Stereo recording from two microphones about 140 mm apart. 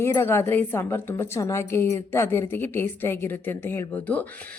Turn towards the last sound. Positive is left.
turn(degrees=10)  # may be behind; listen again after turning